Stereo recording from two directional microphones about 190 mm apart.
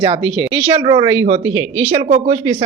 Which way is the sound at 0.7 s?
25° right (ahead or behind).